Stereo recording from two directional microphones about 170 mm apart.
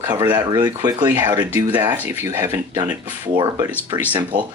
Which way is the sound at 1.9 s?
10° right (ahead or behind).